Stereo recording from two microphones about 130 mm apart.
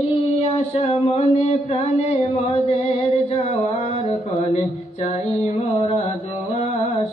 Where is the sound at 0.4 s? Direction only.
50° left (ahead or behind).